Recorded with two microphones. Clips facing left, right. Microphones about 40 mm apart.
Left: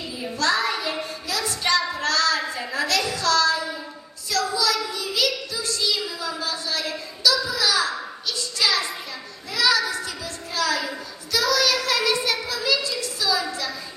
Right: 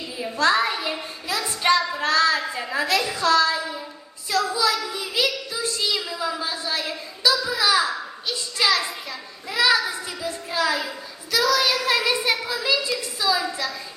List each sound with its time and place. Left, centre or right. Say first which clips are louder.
0.3 s child singing: right 3 dB; right
9.5 s a child's voice: right 1 dB; right
11.3 s child singing: right 2 dB; centre
11.6 s a child's voice: even; centre